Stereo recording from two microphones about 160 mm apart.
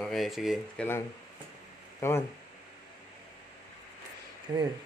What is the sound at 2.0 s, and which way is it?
Speech, 15° left (ahead or behind).